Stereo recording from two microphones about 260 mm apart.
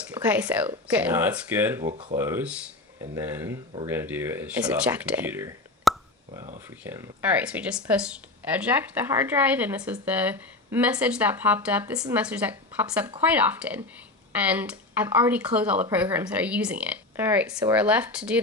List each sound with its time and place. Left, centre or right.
0.1 s a woman's voice: centre
1.9 s speech: right
2.1 s a woman's voice: centre